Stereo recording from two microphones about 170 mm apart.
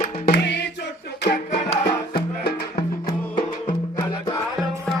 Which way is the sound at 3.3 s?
30° left (ahead or behind).